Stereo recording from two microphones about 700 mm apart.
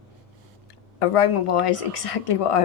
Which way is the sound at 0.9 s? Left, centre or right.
Left.